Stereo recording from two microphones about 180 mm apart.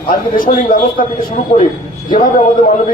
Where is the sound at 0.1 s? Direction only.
50° left (ahead or behind).